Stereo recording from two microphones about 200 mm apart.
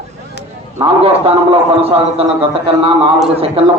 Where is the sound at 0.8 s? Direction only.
30° right (ahead or behind).